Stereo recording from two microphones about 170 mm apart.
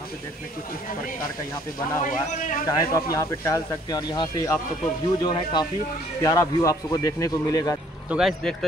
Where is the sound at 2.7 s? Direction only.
20° left (ahead or behind).